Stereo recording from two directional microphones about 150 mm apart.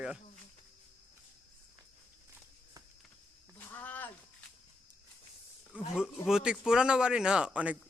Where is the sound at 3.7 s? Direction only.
10° left (ahead or behind).